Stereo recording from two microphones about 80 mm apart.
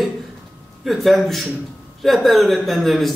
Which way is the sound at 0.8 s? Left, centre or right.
Centre.